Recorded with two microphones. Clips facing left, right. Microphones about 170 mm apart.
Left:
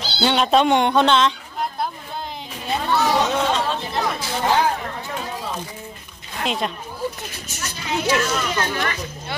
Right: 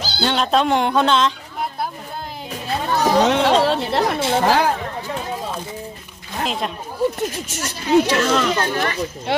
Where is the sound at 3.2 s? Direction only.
70° right (ahead or behind).